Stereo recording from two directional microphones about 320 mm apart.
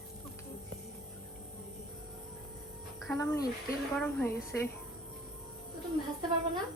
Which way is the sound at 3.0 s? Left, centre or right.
Centre.